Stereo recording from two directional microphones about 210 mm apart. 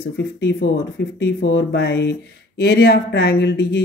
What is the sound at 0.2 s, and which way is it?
Speech, 55° left (ahead or behind).